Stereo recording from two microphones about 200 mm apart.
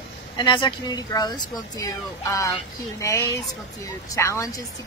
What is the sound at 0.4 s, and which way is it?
A woman's voice, 25° left (ahead or behind).